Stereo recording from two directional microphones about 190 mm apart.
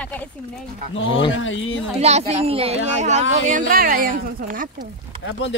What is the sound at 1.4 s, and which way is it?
Speech, 85° left.